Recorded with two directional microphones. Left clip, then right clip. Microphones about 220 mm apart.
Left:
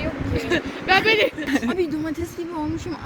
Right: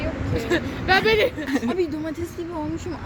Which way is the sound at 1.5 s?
10° left (ahead or behind).